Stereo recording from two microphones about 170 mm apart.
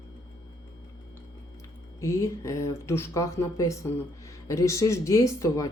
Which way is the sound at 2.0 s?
20° left (ahead or behind).